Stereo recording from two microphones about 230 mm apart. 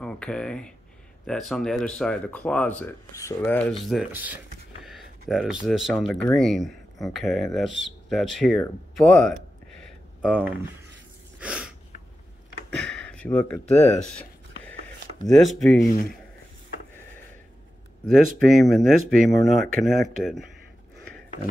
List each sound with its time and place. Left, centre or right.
0.0 s speech: centre
11.3 s a sound: centre
12.7 s a sound: centre
13.7 s speech: left
15.2 s speech: centre
18.0 s speech: centre